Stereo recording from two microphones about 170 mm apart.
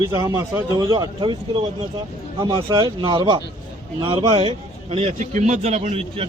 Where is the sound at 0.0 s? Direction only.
25° right (ahead or behind).